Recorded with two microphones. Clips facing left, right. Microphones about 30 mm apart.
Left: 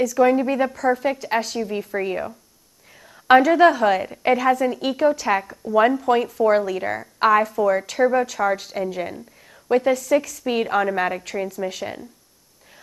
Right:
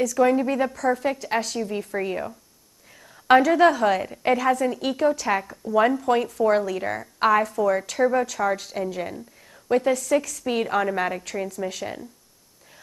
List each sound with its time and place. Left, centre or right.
0.0 s a woman's voice: centre